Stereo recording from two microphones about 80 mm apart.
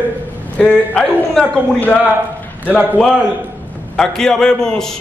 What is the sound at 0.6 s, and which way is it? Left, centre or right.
A man's voice, centre.